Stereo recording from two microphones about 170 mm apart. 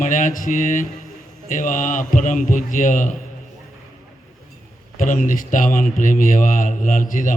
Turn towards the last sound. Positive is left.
turn(degrees=50)  # may be behind; listen again after turning